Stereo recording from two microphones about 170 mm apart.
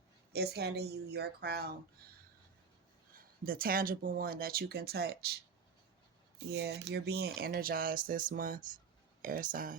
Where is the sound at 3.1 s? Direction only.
60° right (ahead or behind).